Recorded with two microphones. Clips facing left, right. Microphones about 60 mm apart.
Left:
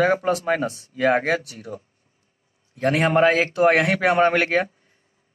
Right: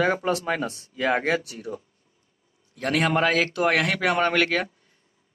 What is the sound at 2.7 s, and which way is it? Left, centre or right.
A man's voice, centre.